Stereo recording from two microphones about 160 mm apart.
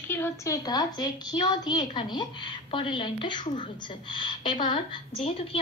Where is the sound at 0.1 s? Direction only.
15° left (ahead or behind).